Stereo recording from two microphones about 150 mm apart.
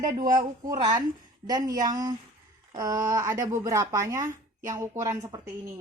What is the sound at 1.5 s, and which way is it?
Speech, 25° right (ahead or behind).